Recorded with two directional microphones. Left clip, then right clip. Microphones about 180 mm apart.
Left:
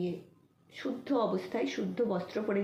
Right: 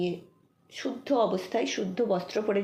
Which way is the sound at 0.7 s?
35° right (ahead or behind).